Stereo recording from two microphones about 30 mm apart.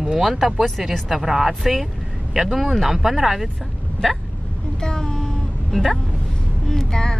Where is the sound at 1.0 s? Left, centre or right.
Centre.